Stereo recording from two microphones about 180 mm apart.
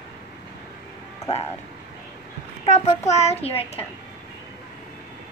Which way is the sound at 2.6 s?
35° left (ahead or behind).